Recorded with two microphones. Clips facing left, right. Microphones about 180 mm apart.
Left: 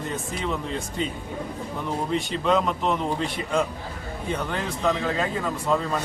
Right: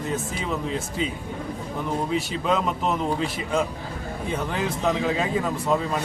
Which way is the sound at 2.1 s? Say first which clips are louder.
Left 4 dB; 5° right (ahead or behind).